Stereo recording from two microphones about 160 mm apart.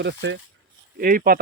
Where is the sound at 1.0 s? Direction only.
70° right (ahead or behind).